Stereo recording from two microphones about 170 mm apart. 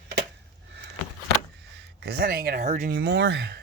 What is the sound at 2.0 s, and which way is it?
Speech, 70° right (ahead or behind).